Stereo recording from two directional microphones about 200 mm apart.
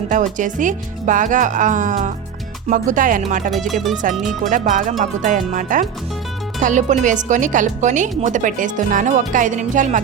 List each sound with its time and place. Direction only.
0.1 s speech: 40° right (ahead or behind)
3.7 s speech: centre (ahead or behind)
4.4 s speech: 40° right (ahead or behind)